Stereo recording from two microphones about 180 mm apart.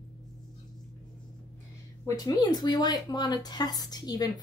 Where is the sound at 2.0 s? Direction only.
20° left (ahead or behind).